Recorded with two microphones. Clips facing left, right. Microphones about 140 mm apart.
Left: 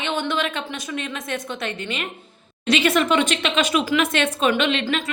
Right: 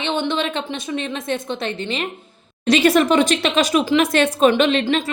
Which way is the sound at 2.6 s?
40° right (ahead or behind).